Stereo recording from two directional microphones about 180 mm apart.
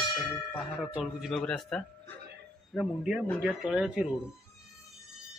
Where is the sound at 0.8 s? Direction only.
Centre (ahead or behind).